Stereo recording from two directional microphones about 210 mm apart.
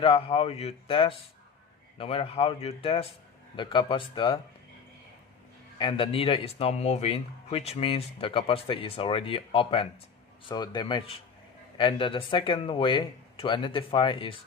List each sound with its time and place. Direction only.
0.0 s speech: 25° left (ahead or behind)
5.8 s speech: 25° left (ahead or behind)